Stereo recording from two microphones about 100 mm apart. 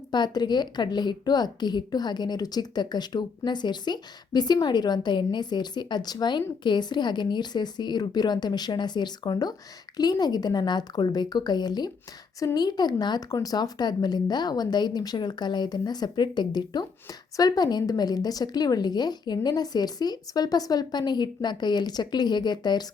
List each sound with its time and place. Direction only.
0.1 s a woman's voice: 45° left (ahead or behind)